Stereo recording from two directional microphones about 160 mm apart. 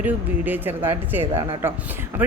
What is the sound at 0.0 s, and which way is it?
Speech, 10° right (ahead or behind).